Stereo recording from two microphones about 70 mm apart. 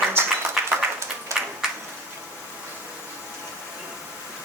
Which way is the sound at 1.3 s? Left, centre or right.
Right.